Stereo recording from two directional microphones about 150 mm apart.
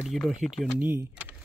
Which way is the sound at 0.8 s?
15° right (ahead or behind).